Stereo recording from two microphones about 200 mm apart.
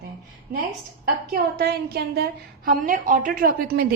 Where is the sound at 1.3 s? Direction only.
50° right (ahead or behind).